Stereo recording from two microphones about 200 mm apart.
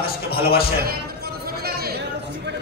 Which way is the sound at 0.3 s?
50° left (ahead or behind).